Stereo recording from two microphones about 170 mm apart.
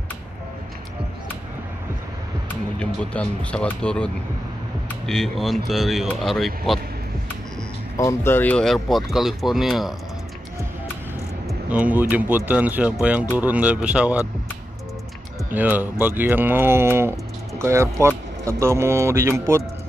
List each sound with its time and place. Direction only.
2.8 s speech: 5° left (ahead or behind)
8.0 s speech: 15° left (ahead or behind); by 9.9 s centre (ahead or behind)
11.4 s speech: 10° right (ahead or behind)
15.5 s speech: 10° right (ahead or behind)